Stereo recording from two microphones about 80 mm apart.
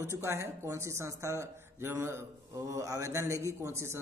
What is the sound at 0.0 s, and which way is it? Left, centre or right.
A man's voice, right.